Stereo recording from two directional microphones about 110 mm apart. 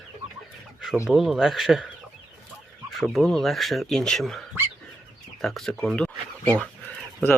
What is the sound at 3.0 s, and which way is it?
Speech, centre (ahead or behind).